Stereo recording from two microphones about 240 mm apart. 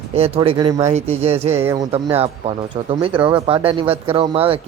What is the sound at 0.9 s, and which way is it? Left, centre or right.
Speech, right.